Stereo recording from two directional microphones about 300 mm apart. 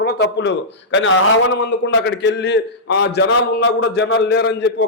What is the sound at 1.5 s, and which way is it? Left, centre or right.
A man's voice, left.